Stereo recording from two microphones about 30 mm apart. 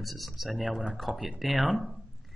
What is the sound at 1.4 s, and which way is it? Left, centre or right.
Speech, centre.